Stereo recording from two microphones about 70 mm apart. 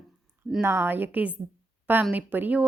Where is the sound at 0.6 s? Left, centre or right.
Right.